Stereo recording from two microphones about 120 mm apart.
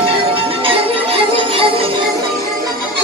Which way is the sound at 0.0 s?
50° right (ahead or behind).